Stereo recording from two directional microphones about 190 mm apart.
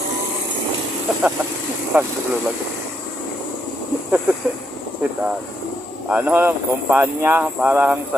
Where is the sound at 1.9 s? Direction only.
5° right (ahead or behind).